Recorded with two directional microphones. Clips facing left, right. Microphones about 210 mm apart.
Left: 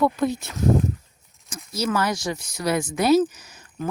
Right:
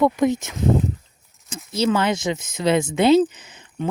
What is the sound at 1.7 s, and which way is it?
Speech, 25° right (ahead or behind).